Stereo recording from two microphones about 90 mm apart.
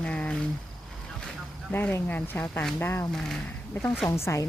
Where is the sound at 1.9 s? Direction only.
20° left (ahead or behind).